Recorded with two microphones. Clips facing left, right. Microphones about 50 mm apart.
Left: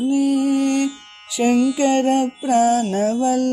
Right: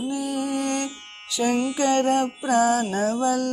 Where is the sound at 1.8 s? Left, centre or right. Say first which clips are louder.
Left 4 dB; left.